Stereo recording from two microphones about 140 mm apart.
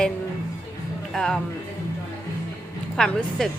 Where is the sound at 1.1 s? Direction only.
5° left (ahead or behind).